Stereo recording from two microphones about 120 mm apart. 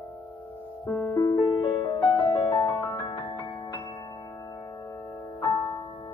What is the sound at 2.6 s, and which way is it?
Music, 30° left (ahead or behind).